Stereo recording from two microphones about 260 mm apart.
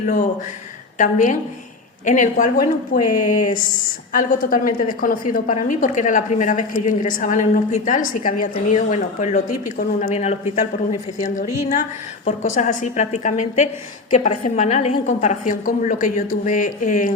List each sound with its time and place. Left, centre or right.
0.0 s a woman's voice: left
12.5 s a woman's voice: left